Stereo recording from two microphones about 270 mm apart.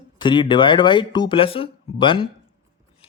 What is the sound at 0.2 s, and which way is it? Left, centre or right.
Speech, centre.